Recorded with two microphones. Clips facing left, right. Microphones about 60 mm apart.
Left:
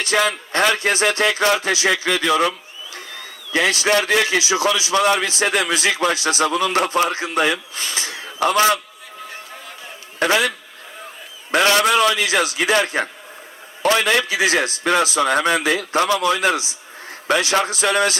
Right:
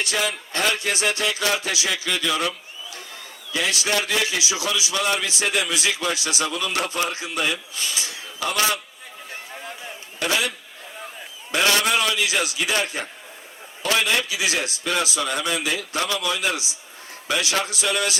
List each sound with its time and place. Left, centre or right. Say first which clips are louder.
0.2 s a man's voice: left 8 dB; left
4.4 s a man's voice: left 7 dB; left
10.2 s a man's voice: left 6 dB; left
11.5 s a man's voice: left 5 dB; left